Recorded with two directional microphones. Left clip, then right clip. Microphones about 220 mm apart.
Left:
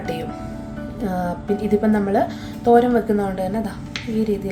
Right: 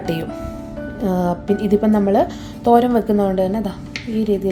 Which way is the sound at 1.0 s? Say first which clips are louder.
Right 4 dB; 25° right (ahead or behind).